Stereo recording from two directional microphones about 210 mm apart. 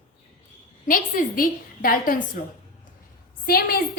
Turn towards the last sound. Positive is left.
turn(degrees=45)  # may be behind; listen again after turning